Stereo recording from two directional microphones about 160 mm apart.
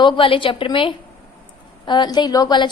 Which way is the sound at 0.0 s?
30° left (ahead or behind).